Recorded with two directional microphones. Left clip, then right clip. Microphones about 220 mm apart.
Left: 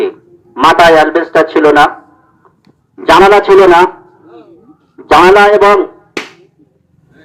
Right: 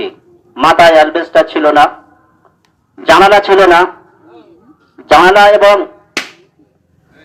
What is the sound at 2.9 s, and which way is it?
Speech, 45° right (ahead or behind).